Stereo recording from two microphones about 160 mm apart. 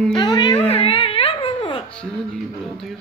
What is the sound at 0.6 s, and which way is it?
Music, 35° left (ahead or behind).